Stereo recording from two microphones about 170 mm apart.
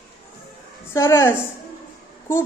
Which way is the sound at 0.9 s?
15° left (ahead or behind).